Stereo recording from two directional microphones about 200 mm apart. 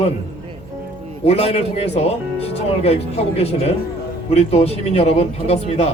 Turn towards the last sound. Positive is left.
turn(degrees=30)  # may be behind; listen again after turning